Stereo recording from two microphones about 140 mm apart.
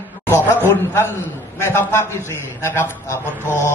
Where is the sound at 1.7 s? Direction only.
15° left (ahead or behind).